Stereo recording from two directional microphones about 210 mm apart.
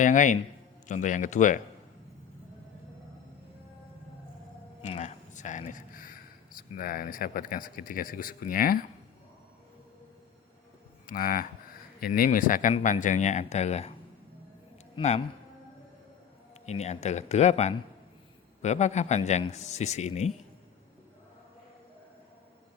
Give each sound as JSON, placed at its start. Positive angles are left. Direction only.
{"t": 0.0, "sound": "speech", "side_deg": 35}
{"t": 4.8, "sound": "a sound", "side_deg": 30}
{"t": 6.6, "sound": "speech", "side_deg": 45}
{"t": 11.0, "sound": "speech", "side_deg": 40}
{"t": 14.9, "sound": "a man's voice", "side_deg": 30}
{"t": 16.6, "sound": "speech", "side_deg": 30}